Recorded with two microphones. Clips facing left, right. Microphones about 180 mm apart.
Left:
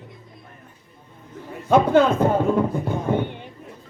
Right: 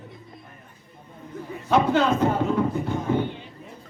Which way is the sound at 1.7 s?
50° left (ahead or behind).